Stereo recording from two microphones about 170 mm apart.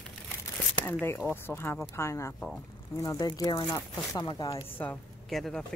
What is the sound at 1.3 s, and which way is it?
Speech, 10° left (ahead or behind).